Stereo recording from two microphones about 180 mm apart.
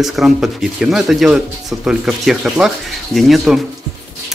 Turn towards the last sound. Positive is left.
turn(degrees=0)  # may be behind; listen again after turning